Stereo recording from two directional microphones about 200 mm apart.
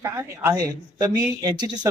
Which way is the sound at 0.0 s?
15° right (ahead or behind).